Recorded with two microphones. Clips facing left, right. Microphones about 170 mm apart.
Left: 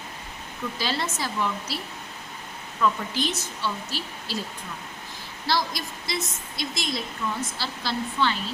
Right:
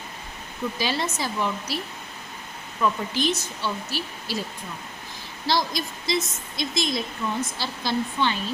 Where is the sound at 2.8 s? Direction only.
15° right (ahead or behind).